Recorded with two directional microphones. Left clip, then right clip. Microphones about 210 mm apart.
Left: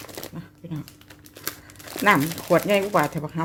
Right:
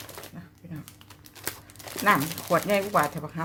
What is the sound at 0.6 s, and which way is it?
Typing, 40° left (ahead or behind).